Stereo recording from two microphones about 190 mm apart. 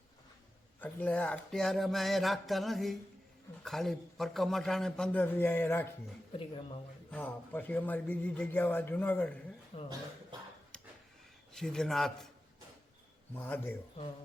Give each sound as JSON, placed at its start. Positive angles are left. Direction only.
{"t": 0.8, "sound": "a man's voice", "side_deg": 10}
{"t": 6.4, "sound": "speech", "side_deg": 30}
{"t": 7.1, "sound": "speech", "side_deg": 10}
{"t": 9.7, "sound": "speech", "side_deg": 30}
{"t": 11.5, "sound": "a man's voice", "side_deg": 5}
{"t": 13.3, "sound": "speech", "side_deg": 10}